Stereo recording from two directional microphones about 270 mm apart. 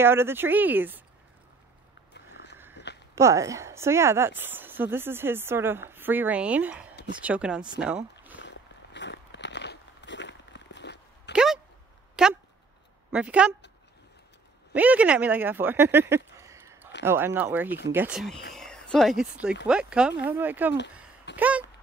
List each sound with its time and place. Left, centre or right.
0.0 s speech: centre
2.1 s a sound: left
3.2 s speech: centre
7.8 s boat: centre
8.4 s biting: left
11.3 s a sound: centre
12.2 s speech: centre
14.7 s speech: centre